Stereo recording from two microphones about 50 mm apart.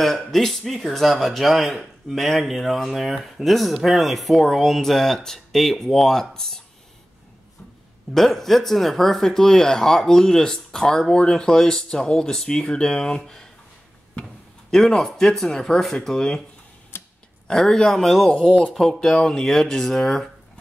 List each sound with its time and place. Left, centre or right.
0.3 s speech: centre
8.1 s speech: centre
14.7 s speech: centre
16.9 s a sound: left
17.5 s speech: centre